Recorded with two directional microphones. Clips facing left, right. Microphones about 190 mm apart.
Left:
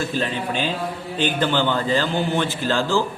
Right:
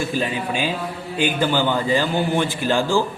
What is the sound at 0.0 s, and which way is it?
A man's voice, 10° right (ahead or behind).